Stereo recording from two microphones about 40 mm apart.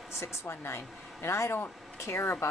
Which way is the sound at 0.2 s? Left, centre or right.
Left.